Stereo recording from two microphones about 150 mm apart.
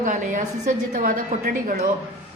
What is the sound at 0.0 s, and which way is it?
A woman's voice, 55° right (ahead or behind).